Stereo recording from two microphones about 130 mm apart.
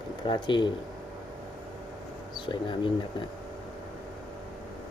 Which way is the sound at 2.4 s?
40° left (ahead or behind).